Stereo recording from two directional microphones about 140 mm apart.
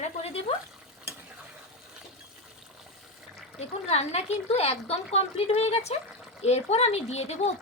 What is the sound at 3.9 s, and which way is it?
Speech, 50° left (ahead or behind).